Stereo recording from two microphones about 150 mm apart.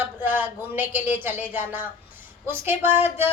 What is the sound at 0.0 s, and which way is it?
Music, 10° right (ahead or behind).